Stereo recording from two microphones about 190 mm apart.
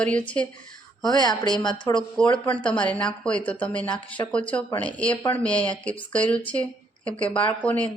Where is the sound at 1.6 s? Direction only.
25° left (ahead or behind).